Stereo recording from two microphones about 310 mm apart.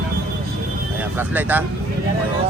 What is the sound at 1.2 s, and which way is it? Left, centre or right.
Speech, centre.